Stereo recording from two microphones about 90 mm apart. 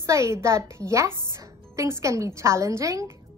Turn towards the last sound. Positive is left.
turn(degrees=-35)  # may be behind; listen again after turning